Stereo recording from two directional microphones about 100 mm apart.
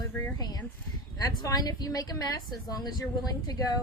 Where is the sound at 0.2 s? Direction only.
35° left (ahead or behind).